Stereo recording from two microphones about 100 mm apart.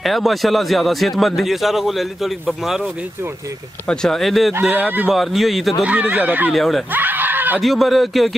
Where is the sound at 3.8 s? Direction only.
5° left (ahead or behind).